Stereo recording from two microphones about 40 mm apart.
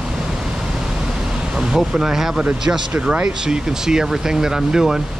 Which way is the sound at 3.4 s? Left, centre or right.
Centre.